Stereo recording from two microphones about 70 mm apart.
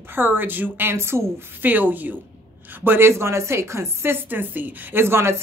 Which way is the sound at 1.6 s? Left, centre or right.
Right.